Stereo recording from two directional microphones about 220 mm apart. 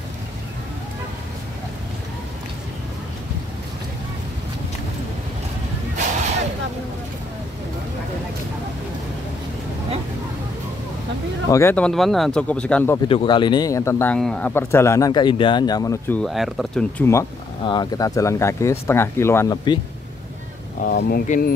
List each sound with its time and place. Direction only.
11.5 s speech: 10° left (ahead or behind)
13.1 s speech: 20° left (ahead or behind)
16.2 s speech: centre (ahead or behind)
17.0 s speech: 15° left (ahead or behind)
20.8 s speech: 40° left (ahead or behind)